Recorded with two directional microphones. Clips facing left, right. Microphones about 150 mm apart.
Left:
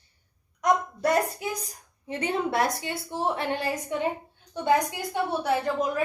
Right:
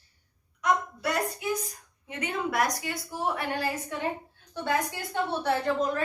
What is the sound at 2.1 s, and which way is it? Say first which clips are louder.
A woman's voice: left 4 dB; 30° left (ahead or behind).